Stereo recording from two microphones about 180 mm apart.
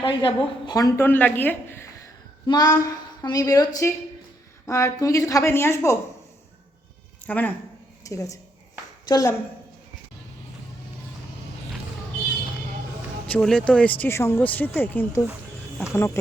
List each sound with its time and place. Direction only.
0.0 s a woman's voice: 25° left (ahead or behind)
7.3 s a woman's voice: 10° left (ahead or behind)
13.2 s a woman's voice: 5° left (ahead or behind)